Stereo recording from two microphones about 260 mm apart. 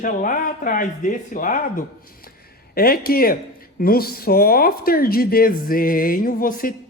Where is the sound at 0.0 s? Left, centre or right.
Left.